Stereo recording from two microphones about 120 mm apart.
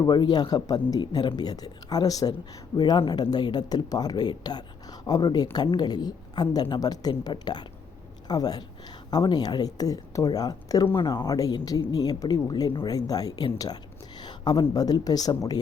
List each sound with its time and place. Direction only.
0.0 s speech: 35° left (ahead or behind)